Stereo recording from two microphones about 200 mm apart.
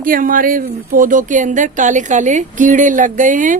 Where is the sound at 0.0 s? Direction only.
45° right (ahead or behind).